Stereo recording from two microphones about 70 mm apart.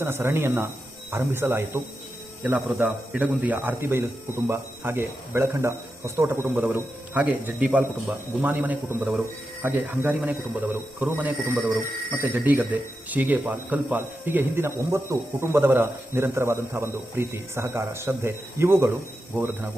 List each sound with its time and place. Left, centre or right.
0.0 s speech: right
2.6 s speech: centre